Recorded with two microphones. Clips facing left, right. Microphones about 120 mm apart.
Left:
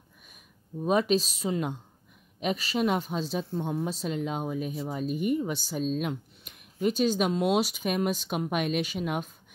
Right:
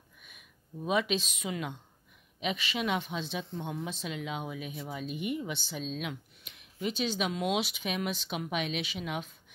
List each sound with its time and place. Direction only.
0.8 s speech: 40° left (ahead or behind)